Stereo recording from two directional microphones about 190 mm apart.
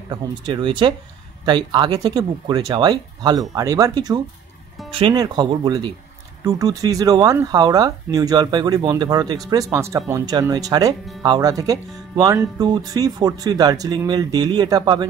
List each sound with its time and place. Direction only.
0.1 s speech: 25° right (ahead or behind)